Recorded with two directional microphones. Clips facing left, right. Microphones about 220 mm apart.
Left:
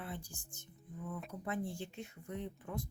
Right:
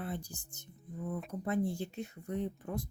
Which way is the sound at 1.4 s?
40° right (ahead or behind).